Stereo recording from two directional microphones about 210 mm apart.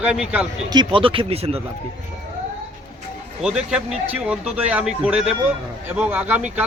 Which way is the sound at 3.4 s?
5° right (ahead or behind).